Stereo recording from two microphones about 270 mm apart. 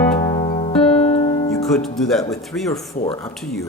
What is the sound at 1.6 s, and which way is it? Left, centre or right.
Speech, centre.